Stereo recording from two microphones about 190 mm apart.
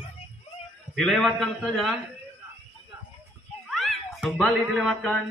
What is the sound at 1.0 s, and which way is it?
Speech, centre (ahead or behind).